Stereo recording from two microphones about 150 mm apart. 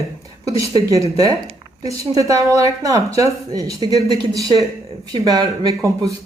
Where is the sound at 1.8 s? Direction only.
20° right (ahead or behind).